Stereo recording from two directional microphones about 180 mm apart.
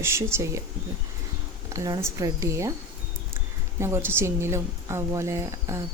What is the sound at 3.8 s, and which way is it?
Speech, 15° right (ahead or behind).